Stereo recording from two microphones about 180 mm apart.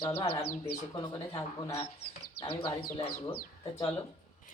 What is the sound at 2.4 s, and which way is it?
Speech, 25° left (ahead or behind).